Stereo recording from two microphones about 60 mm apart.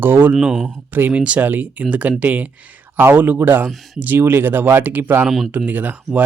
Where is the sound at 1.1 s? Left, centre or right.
Right.